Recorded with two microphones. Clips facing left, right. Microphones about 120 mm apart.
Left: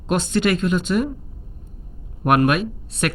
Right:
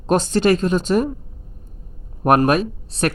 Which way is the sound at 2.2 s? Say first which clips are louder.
Right 2 dB; 35° right (ahead or behind).